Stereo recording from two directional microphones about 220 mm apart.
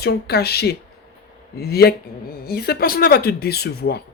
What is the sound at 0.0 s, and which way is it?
Speech, 45° left (ahead or behind).